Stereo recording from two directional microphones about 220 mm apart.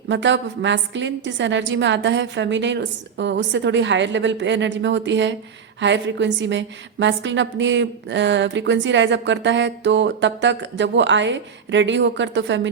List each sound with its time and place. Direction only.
0.1 s a woman's voice: 55° right (ahead or behind)